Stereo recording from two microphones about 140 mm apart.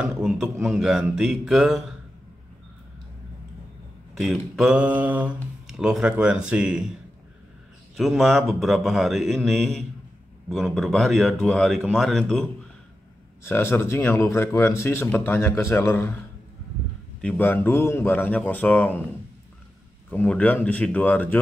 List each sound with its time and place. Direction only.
0.0 s speech: 5° right (ahead or behind)
4.2 s speech: centre (ahead or behind)
7.9 s speech: centre (ahead or behind)
13.4 s speech: 20° left (ahead or behind)
17.2 s speech: 10° left (ahead or behind)
20.1 s speech: 10° left (ahead or behind)